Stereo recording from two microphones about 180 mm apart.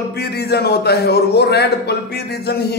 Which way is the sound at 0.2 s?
65° left (ahead or behind).